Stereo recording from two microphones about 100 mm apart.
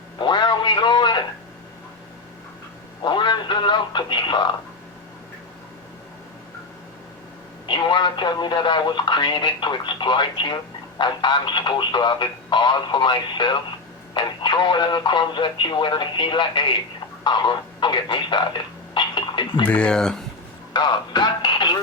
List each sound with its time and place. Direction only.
0.2 s a sound: 50° left (ahead or behind)
3.0 s speech: 50° left (ahead or behind)
7.7 s speech: 50° left (ahead or behind)
19.6 s speech: 10° left (ahead or behind)
20.7 s speech: 50° left (ahead or behind)